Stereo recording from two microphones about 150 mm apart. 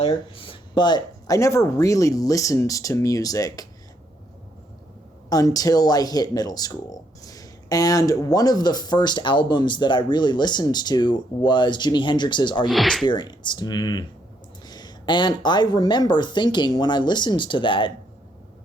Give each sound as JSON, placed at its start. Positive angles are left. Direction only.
{"t": 0.1, "sound": "speech", "side_deg": 35}
{"t": 5.3, "sound": "speech", "side_deg": 25}
{"t": 12.7, "sound": "speech", "side_deg": 0}
{"t": 13.1, "sound": "speech", "side_deg": 30}